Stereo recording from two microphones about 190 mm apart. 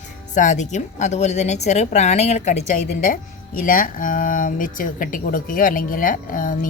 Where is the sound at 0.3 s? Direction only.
40° left (ahead or behind).